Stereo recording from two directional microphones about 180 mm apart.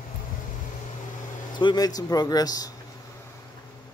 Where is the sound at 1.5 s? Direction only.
25° left (ahead or behind).